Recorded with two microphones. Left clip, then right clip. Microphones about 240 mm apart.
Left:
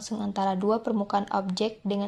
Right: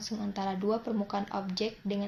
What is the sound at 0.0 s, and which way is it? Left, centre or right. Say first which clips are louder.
Speech: left 7 dB; left.